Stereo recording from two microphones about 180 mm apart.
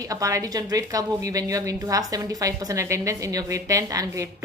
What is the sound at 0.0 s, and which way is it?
A woman's voice, 20° right (ahead or behind).